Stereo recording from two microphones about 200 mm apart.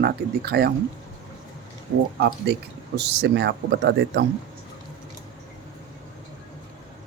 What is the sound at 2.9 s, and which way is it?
Speech, 55° right (ahead or behind).